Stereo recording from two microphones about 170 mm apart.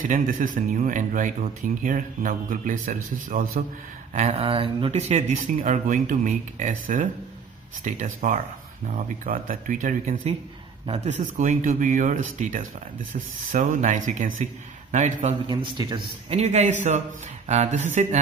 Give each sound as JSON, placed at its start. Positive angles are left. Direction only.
{"t": 0.1, "sound": "a man's voice", "side_deg": -50}
{"t": 4.1, "sound": "a man's voice", "side_deg": -40}
{"t": 15.4, "sound": "speech", "side_deg": -30}
{"t": 16.3, "sound": "a man's voice", "side_deg": -40}